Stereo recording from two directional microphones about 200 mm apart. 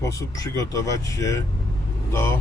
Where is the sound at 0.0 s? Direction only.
15° left (ahead or behind).